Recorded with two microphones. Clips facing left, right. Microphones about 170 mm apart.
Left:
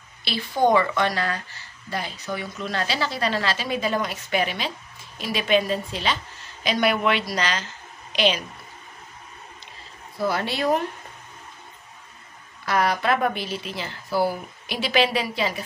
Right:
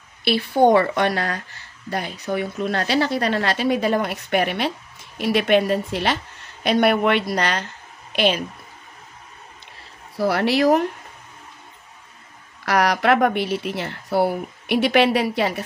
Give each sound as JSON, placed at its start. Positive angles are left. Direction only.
{"t": 0.2, "sound": "a woman's voice", "side_deg": -60}
{"t": 10.1, "sound": "speech", "side_deg": -70}
{"t": 12.6, "sound": "speech", "side_deg": -75}